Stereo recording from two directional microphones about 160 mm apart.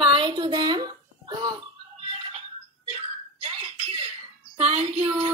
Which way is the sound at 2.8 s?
40° right (ahead or behind).